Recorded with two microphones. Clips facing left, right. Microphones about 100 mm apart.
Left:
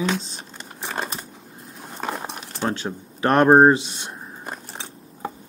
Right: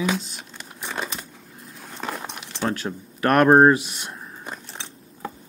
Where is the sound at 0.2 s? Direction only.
30° left (ahead or behind).